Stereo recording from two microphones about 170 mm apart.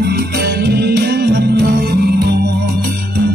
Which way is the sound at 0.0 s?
65° right (ahead or behind).